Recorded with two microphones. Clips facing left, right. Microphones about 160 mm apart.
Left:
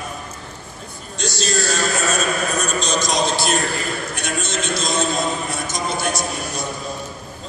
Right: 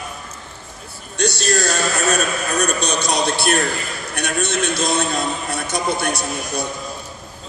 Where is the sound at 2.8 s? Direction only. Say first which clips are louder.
Even; 65° right (ahead or behind).